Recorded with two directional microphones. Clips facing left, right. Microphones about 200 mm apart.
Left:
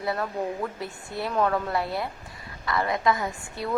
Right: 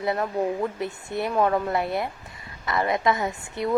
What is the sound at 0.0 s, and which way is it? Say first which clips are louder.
A woman's voice: right 4 dB; 20° right (ahead or behind).